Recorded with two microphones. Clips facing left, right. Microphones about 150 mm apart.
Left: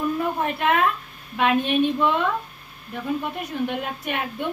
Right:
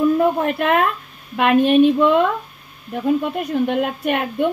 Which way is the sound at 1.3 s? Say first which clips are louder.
Right 6 dB; 55° right (ahead or behind).